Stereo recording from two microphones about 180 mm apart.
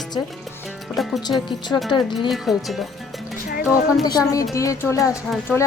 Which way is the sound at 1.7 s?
10° left (ahead or behind).